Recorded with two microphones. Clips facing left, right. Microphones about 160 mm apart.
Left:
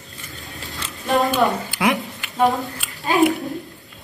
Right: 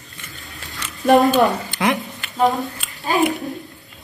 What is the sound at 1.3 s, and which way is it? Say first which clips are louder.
Speech: right 3 dB; 5° left (ahead or behind).